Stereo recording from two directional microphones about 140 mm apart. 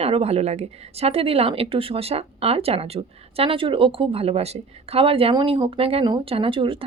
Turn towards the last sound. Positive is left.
turn(degrees=-40)  # may be behind; listen again after turning